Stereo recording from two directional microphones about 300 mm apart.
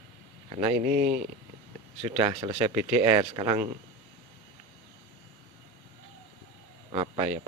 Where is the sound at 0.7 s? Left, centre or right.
Right.